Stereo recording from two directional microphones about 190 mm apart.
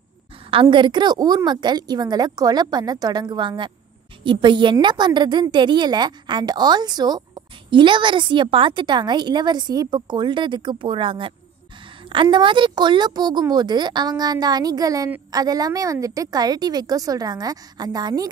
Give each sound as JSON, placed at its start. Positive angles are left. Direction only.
{"t": 0.5, "sound": "a woman's voice", "side_deg": -25}